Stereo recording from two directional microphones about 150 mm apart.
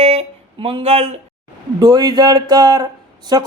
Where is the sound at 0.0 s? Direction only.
45° right (ahead or behind).